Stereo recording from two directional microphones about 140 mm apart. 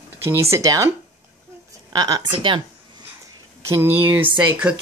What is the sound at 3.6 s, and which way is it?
Speech, 15° right (ahead or behind).